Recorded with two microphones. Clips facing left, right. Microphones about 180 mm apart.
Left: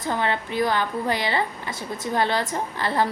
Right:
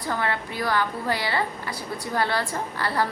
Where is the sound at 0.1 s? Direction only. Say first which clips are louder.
Left 3 dB; 20° left (ahead or behind).